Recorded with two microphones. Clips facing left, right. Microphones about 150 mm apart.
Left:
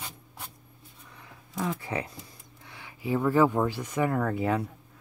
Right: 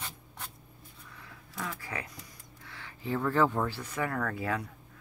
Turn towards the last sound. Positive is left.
turn(degrees=25)  # may be behind; listen again after turning